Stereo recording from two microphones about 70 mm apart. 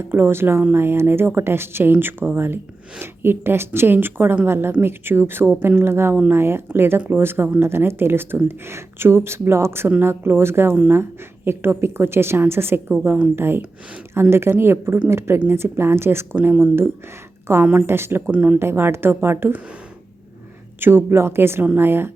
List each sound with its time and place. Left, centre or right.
0.0 s speech: right
18.3 s speech: centre
18.6 s speech: right
20.8 s speech: right